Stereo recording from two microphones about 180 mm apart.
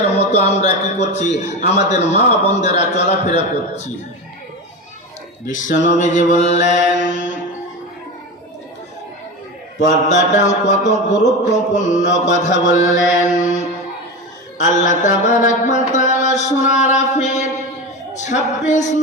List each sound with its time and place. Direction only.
0.1 s a man's voice: 35° left (ahead or behind)
5.5 s a man's voice: 45° left (ahead or behind)
7.1 s music: 45° left (ahead or behind)
10.3 s a man's voice: 40° left (ahead or behind)
12.2 s mantra: 40° left (ahead or behind)
14.6 s mantra: 45° left (ahead or behind)